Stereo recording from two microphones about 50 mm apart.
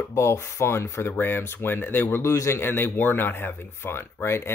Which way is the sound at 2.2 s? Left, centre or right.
Left.